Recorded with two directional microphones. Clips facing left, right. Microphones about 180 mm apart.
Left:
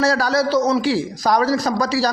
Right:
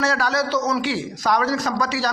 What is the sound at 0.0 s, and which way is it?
Speech, 35° left (ahead or behind).